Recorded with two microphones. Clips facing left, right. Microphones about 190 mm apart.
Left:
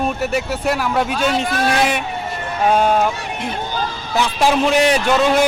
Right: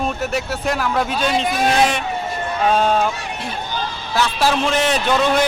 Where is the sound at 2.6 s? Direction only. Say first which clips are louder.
Left 2 dB; 10° left (ahead or behind).